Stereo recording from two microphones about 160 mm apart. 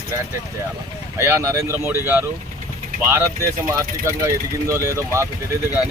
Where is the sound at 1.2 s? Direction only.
15° right (ahead or behind).